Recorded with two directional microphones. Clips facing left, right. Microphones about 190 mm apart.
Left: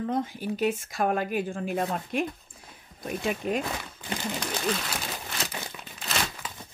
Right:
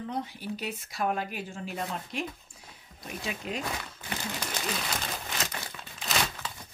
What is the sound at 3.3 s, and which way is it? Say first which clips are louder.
Speech: left 7 dB; 50° left (ahead or behind).